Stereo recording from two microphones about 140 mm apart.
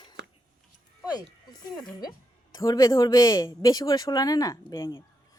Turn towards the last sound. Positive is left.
turn(degrees=25)  # may be behind; listen again after turning